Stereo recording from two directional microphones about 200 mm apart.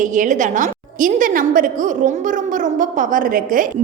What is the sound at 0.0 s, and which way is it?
A woman's voice, 40° right (ahead or behind).